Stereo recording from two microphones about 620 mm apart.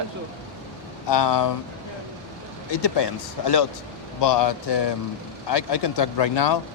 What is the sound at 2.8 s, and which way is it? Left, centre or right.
Speech, left.